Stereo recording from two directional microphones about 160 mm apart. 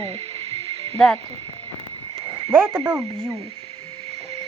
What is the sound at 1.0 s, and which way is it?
Speech, centre (ahead or behind).